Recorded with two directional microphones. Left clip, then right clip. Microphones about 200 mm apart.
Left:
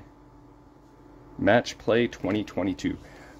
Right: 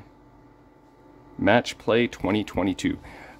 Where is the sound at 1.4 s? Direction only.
15° right (ahead or behind).